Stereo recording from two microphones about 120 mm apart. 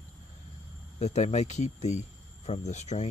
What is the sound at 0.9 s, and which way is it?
Speech, 70° left (ahead or behind).